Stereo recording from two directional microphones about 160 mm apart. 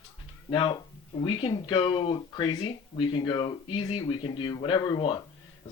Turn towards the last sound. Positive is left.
turn(degrees=30)  # may be behind; listen again after turning